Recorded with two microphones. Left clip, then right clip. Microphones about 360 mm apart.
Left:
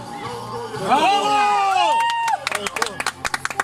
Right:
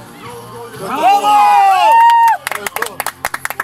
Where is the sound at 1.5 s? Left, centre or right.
Right.